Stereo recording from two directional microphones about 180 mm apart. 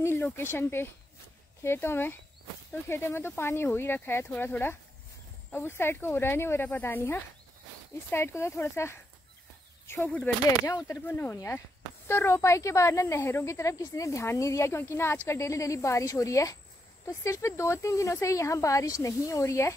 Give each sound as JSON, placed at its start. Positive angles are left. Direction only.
{"t": 0.0, "sound": "speech", "side_deg": 10}
{"t": 10.7, "sound": "speech", "side_deg": 20}